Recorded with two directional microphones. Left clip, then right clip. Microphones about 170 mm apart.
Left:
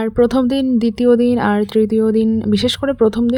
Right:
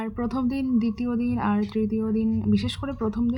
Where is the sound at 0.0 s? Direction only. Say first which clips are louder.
Left 14 dB; 45° left (ahead or behind).